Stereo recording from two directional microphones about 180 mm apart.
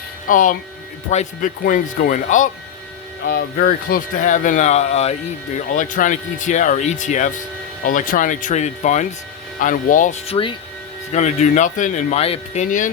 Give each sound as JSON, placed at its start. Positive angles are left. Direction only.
{"t": 0.3, "sound": "speech", "side_deg": 50}
{"t": 3.2, "sound": "speech", "side_deg": 60}
{"t": 11.1, "sound": "speech", "side_deg": 40}